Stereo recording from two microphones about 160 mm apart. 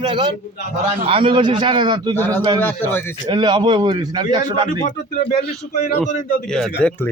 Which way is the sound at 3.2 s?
30° right (ahead or behind).